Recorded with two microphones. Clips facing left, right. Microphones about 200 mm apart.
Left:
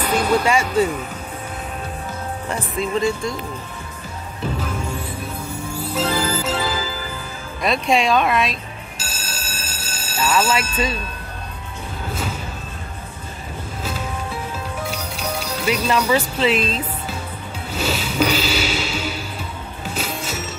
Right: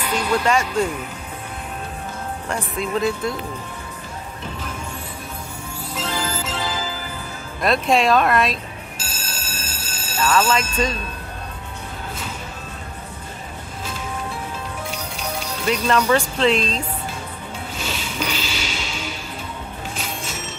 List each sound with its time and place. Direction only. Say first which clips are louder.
0.0 s speech: left 3 dB; 45° left (ahead or behind)
0.5 s speech: left 2 dB; 10° left (ahead or behind)
2.4 s speech: left 2 dB; centre (ahead or behind)
5.9 s music: left 5 dB; 40° left (ahead or behind)
7.6 s speech: right 1 dB; centre (ahead or behind)
8.9 s a sound: left 1 dB; 40° left (ahead or behind)
10.1 s speech: even; 10° left (ahead or behind)
14.9 s music: left 2 dB; 40° left (ahead or behind)
15.6 s speech: right 1 dB; 10° left (ahead or behind)
17.7 s a sound: left 9 dB; 40° left (ahead or behind)
20.2 s bell: left 4 dB; 40° left (ahead or behind)